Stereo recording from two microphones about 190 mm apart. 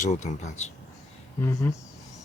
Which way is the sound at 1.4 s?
15° left (ahead or behind).